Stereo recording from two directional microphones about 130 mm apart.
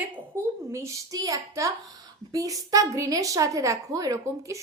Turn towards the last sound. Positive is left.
turn(degrees=-25)  # may be behind; listen again after turning